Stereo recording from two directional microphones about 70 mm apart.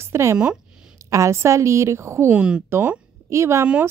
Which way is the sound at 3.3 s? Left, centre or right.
Right.